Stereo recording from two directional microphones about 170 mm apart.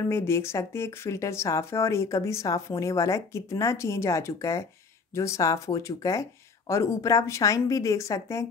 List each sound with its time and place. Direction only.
0.1 s speech: 15° left (ahead or behind)